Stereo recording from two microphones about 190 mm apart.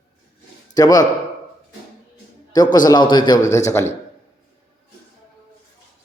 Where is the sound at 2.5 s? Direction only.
20° left (ahead or behind).